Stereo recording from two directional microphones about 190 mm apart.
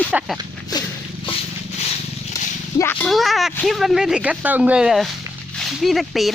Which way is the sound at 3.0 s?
Centre (ahead or behind).